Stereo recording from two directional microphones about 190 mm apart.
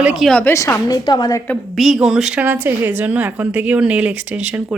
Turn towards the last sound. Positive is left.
turn(degrees=-5)  # may be behind; listen again after turning